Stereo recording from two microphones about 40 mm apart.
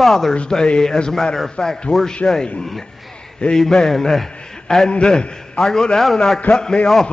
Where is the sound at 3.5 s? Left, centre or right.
Centre.